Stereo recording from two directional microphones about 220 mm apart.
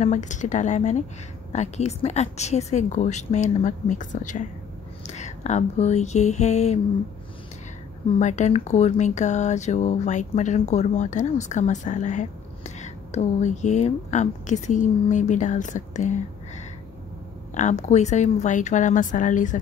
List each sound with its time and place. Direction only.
0.0 s speech: 35° left (ahead or behind)
8.2 s speech: 30° left (ahead or behind)